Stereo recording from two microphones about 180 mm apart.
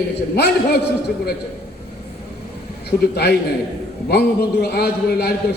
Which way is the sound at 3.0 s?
65° left (ahead or behind).